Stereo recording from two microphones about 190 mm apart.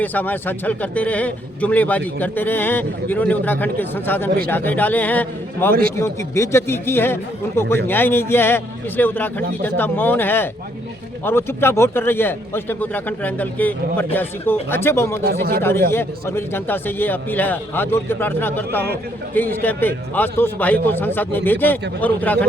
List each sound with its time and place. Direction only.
0.0 s a man's voice: 10° left (ahead or behind)
15.2 s speech: 55° right (ahead or behind)
15.9 s a man's voice: 15° left (ahead or behind)